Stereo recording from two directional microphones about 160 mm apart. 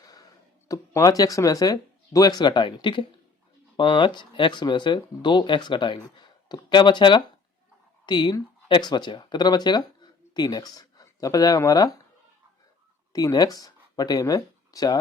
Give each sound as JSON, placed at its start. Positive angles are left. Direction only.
{"t": 0.0, "sound": "a sound", "side_deg": 25}
{"t": 0.7, "sound": "speech", "side_deg": 20}
{"t": 13.1, "sound": "speech", "side_deg": 25}